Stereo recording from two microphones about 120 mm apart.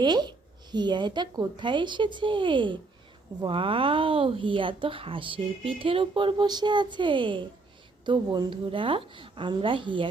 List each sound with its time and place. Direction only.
0.0 s speech: 35° right (ahead or behind)